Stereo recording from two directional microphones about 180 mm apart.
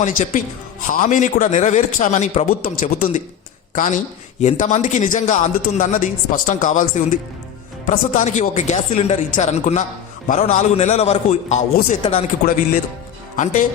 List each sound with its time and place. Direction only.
0.0 s a man's voice: 45° left (ahead or behind)
13.3 s speech: 45° left (ahead or behind)